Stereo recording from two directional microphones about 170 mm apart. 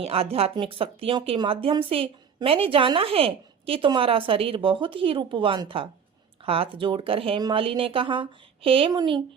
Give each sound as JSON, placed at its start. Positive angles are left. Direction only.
{"t": 0.0, "sound": "speech", "side_deg": -35}